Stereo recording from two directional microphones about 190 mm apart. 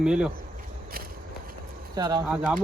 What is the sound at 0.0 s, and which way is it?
Speech, 5° right (ahead or behind).